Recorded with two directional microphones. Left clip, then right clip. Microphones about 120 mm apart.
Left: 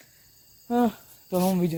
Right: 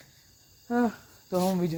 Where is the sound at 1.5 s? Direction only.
30° left (ahead or behind).